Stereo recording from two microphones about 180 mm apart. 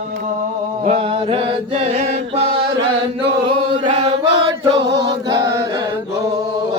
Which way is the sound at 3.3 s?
30° right (ahead or behind).